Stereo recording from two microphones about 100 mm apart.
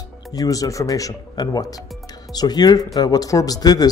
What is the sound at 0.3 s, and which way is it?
Speech, 40° left (ahead or behind).